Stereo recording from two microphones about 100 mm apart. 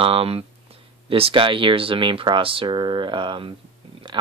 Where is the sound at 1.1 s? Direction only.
65° right (ahead or behind).